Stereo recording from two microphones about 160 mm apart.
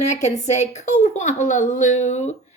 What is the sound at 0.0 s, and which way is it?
Speech, 45° left (ahead or behind).